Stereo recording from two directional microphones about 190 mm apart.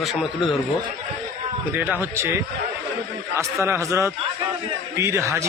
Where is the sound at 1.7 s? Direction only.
10° right (ahead or behind).